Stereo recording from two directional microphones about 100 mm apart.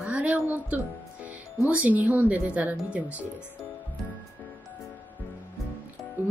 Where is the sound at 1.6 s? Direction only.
15° right (ahead or behind).